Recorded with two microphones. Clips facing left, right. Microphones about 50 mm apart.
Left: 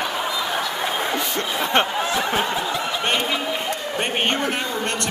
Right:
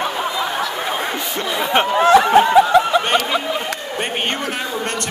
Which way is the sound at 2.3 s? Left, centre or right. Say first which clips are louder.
Right 10 dB; right.